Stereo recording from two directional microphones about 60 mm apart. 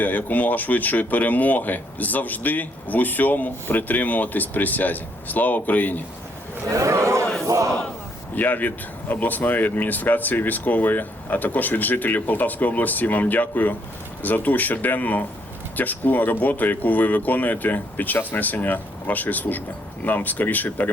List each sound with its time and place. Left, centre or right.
0.0 s speech: left
6.7 s speech: right
7.4 s battle cry: right
8.4 s speech: left